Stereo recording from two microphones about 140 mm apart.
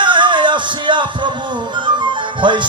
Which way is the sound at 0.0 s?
35° right (ahead or behind).